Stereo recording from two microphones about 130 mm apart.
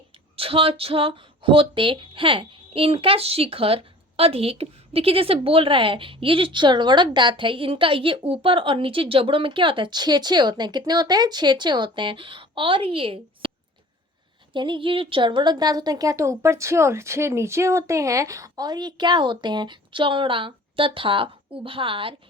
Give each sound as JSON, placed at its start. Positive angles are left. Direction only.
{"t": 0.3, "sound": "speech", "side_deg": -45}
{"t": 14.5, "sound": "speech", "side_deg": -40}